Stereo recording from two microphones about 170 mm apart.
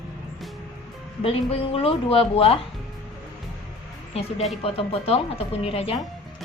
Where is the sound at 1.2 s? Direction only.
35° left (ahead or behind).